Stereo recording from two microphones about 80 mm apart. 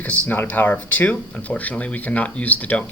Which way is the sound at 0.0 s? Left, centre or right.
Centre.